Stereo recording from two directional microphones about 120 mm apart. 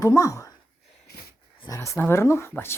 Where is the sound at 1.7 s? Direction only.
25° left (ahead or behind).